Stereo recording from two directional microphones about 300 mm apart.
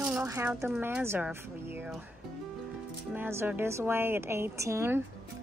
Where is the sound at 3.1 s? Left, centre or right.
Centre.